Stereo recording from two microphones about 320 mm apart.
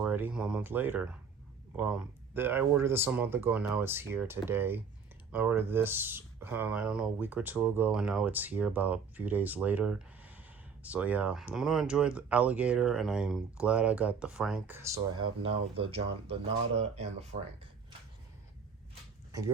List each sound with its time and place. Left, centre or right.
0.0 s speech: centre